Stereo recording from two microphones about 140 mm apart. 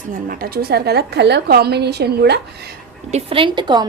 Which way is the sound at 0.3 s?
90° right.